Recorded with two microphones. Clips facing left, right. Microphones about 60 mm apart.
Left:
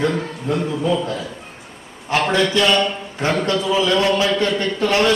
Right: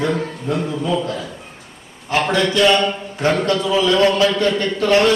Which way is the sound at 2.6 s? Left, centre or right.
Centre.